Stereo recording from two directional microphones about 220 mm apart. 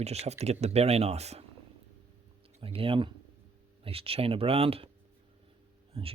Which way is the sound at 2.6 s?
25° right (ahead or behind).